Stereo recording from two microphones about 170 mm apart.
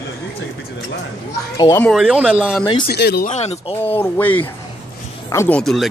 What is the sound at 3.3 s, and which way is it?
Speech, 40° left (ahead or behind).